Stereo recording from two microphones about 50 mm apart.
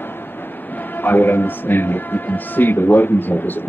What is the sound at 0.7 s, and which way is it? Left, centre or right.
Speech, left.